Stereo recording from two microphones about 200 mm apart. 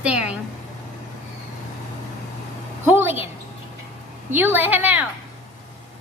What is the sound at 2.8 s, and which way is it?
Speech, 10° right (ahead or behind).